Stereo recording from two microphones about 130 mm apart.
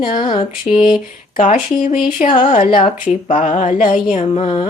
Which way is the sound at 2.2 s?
70° left (ahead or behind).